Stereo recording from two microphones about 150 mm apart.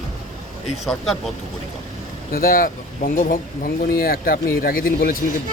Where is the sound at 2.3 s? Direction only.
75° left (ahead or behind).